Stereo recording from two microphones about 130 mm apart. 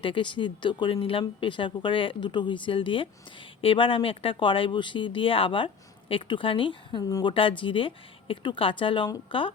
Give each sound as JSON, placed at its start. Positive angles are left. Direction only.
{"t": 0.0, "sound": "speech", "side_deg": 40}